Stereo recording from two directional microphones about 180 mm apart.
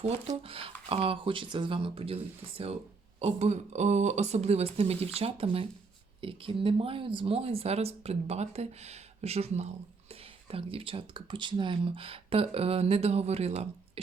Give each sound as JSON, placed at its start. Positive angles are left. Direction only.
{"t": 0.0, "sound": "speech", "side_deg": -30}